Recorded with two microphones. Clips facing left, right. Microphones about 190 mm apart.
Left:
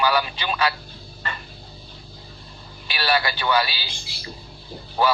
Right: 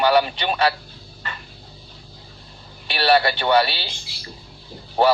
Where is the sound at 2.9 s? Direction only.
30° right (ahead or behind).